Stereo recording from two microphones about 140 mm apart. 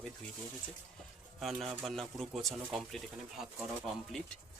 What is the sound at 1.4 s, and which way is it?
Speech, centre (ahead or behind).